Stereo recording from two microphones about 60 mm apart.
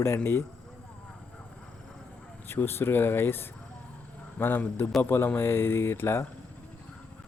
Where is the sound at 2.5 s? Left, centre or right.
Left.